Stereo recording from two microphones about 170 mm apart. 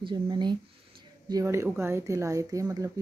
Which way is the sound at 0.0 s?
25° right (ahead or behind).